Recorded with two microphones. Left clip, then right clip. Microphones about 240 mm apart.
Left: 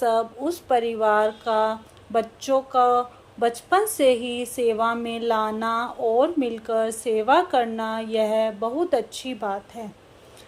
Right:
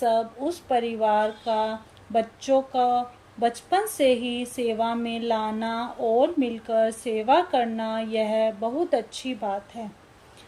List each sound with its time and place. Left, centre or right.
0.0 s a woman's voice: centre